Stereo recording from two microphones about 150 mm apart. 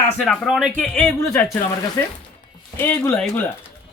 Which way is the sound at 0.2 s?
Centre (ahead or behind).